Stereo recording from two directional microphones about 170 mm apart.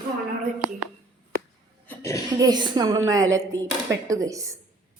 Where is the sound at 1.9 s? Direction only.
15° left (ahead or behind).